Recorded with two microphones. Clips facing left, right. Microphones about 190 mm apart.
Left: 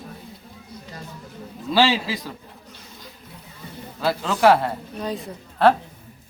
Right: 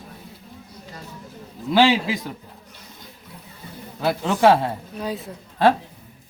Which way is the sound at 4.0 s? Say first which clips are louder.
Right 1 dB; 20° right (ahead or behind).